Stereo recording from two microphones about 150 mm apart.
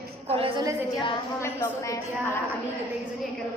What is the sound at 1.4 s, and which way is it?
Speech, 20° left (ahead or behind).